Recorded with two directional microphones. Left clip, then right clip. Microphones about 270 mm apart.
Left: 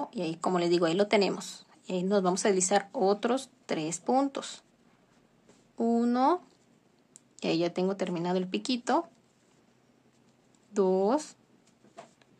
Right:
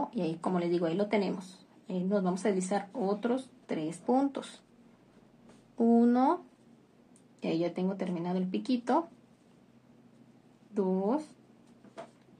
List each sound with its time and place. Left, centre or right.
0.0 s speech: centre
5.8 s speech: centre
7.3 s speech: left
10.7 s speech: left